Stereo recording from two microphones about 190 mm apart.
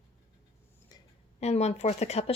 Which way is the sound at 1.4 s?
35° left (ahead or behind).